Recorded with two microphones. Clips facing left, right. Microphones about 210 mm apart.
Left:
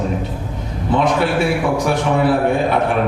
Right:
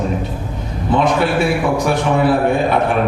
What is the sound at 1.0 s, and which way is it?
Mantra, 20° right (ahead or behind).